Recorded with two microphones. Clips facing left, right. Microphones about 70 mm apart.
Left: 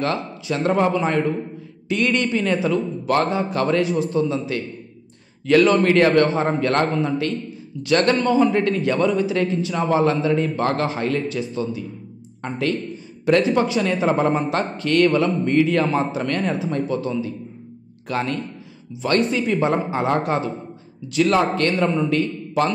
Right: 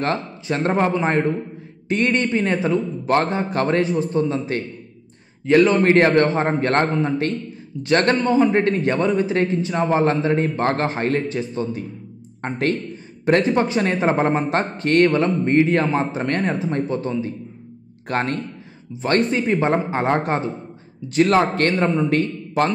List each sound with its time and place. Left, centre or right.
0.0 s a man's voice: right
5.5 s a man's voice: right
8.2 s a man's voice: right
8.5 s a man's voice: right